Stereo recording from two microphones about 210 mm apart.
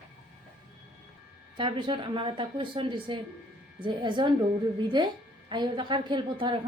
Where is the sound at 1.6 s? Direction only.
25° right (ahead or behind).